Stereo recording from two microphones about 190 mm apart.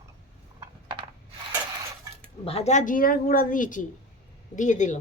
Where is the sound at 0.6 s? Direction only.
25° right (ahead or behind).